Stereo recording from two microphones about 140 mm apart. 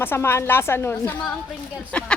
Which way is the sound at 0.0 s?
15° left (ahead or behind).